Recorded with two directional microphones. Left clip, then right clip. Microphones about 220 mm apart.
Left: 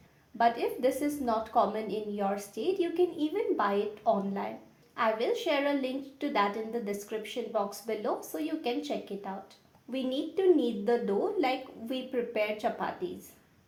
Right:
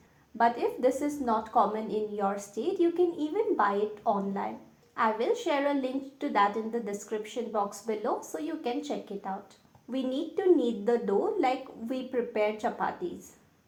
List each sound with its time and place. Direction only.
0.3 s a woman's voice: 25° right (ahead or behind)